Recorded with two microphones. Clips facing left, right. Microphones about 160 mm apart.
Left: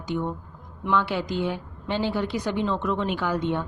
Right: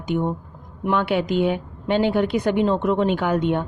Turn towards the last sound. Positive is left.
turn(degrees=-60)  # may be behind; listen again after turning